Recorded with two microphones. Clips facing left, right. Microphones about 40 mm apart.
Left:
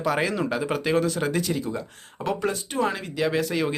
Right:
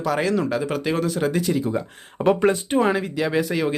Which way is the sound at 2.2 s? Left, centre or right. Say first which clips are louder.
Right 8 dB; right.